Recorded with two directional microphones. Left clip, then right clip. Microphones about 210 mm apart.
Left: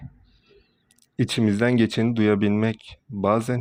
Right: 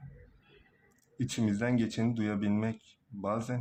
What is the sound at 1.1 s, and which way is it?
Speech, 35° left (ahead or behind).